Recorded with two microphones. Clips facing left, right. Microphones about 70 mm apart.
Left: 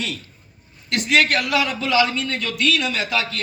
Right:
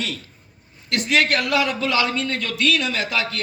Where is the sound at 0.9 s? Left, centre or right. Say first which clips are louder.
Left 1 dB; right.